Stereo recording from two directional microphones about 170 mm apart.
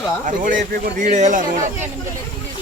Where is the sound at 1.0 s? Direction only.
45° right (ahead or behind).